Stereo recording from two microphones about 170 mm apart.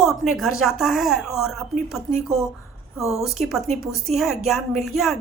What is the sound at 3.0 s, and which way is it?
Speech, 40° right (ahead or behind).